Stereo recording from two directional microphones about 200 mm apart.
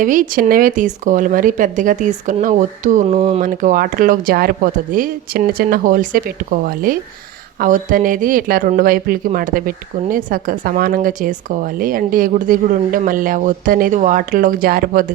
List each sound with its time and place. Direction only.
0.0 s speech: 40° right (ahead or behind)